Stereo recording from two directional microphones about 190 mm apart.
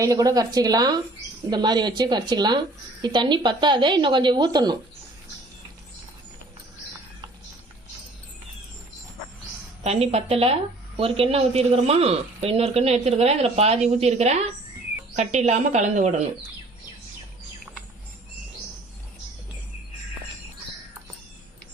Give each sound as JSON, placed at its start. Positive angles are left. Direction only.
{"t": 0.0, "sound": "a woman's voice", "side_deg": -20}
{"t": 9.8, "sound": "a woman's voice", "side_deg": -35}